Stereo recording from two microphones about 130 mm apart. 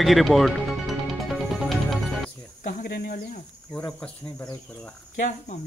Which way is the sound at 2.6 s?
90° left.